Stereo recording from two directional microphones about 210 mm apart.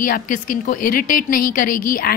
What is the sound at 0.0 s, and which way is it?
A woman's voice, 40° left (ahead or behind).